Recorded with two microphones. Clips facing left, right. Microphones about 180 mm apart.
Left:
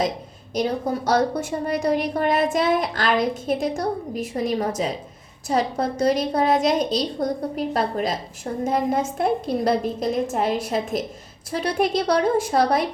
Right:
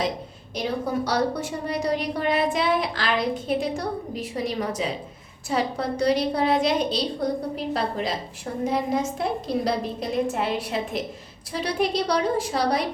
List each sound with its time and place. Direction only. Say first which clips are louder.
0.6 s a woman's voice: left 3 dB; 40° left (ahead or behind)